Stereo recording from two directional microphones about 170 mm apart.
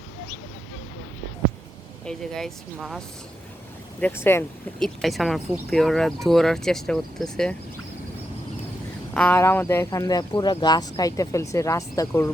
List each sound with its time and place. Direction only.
2.0 s speech: centre (ahead or behind)
4.0 s speech: 15° left (ahead or behind)
4.8 s speech: centre (ahead or behind)
9.1 s speech: 10° left (ahead or behind)